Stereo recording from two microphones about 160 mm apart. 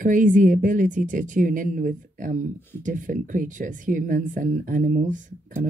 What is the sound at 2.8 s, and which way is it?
Speech, 55° right (ahead or behind).